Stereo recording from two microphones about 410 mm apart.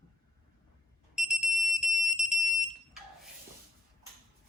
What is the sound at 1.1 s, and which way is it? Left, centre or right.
Alarm, centre.